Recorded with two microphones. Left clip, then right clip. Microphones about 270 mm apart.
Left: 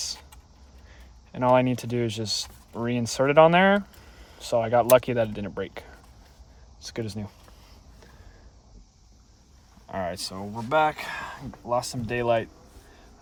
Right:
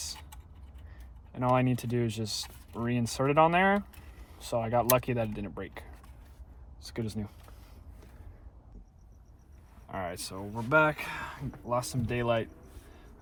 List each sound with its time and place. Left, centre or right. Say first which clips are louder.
1.3 s speech: left 7 dB; left
9.9 s speech: left 6 dB; left